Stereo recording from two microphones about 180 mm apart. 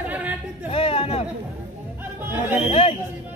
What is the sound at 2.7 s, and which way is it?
Speech, 35° left (ahead or behind).